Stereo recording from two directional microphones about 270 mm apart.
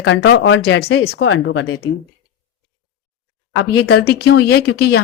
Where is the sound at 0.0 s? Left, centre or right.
Left.